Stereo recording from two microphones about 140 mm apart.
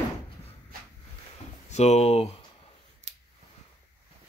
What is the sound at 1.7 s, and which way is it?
Speech, 50° left (ahead or behind).